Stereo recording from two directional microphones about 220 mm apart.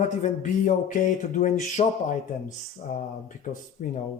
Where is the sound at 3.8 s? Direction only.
40° left (ahead or behind).